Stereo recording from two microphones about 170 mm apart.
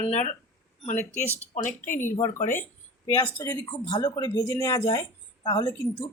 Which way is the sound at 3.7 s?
25° left (ahead or behind).